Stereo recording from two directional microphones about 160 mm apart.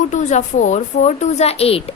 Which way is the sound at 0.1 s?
50° left (ahead or behind).